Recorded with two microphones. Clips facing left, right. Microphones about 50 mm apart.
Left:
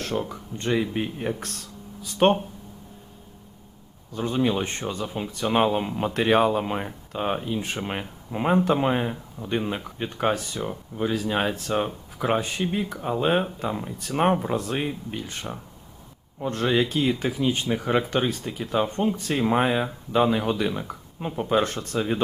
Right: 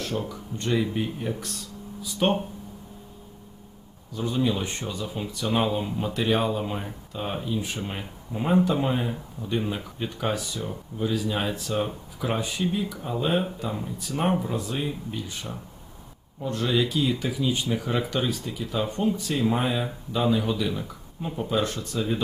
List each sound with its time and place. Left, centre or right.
0.3 s speech: left
1.4 s speech: left
4.1 s speech: left
5.0 s speech: left
5.3 s speech: left